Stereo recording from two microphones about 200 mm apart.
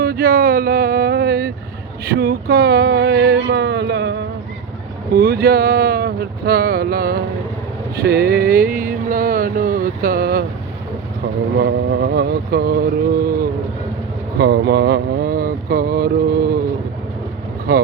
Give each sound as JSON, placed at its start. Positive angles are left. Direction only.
{"t": 0.0, "sound": "speech", "side_deg": -50}
{"t": 2.0, "sound": "a sound", "side_deg": -50}
{"t": 5.1, "sound": "speech", "side_deg": -50}
{"t": 7.9, "sound": "a sound", "side_deg": -50}
{"t": 11.5, "sound": "speech", "side_deg": -55}
{"t": 14.3, "sound": "speech", "side_deg": -55}